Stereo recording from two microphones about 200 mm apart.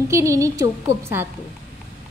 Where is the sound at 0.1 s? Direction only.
15° right (ahead or behind).